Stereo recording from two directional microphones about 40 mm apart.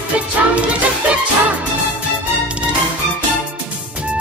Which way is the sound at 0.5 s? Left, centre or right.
Right.